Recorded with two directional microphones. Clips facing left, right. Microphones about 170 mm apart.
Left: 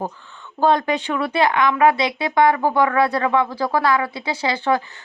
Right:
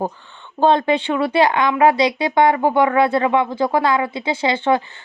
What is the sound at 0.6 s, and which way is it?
Speech, 25° right (ahead or behind).